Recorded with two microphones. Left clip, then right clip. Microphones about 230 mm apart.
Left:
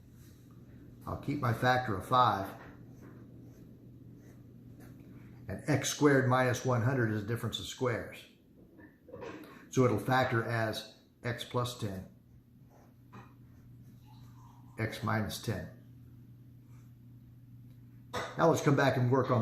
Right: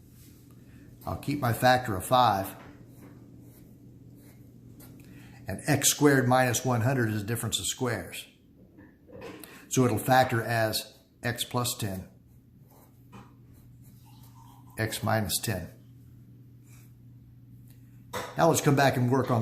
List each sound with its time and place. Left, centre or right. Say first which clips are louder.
1.0 s speech: right 5 dB; right
5.5 s speech: right 6 dB; right
9.7 s speech: right 6 dB; right
14.8 s speech: right 6 dB; right
18.3 s speech: right 4 dB; right